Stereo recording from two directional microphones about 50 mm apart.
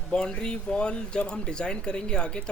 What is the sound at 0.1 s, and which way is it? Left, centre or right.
Speech, centre.